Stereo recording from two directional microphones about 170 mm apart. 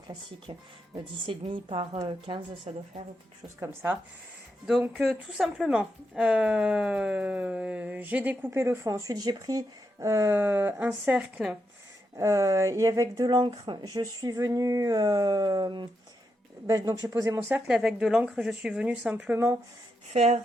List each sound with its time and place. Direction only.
0.5 s speech: 30° right (ahead or behind)
3.6 s speech: 15° right (ahead or behind)
4.9 s speech: centre (ahead or behind)
12.1 s speech: 15° right (ahead or behind)
17.5 s speech: 5° right (ahead or behind)
20.1 s speech: 40° right (ahead or behind)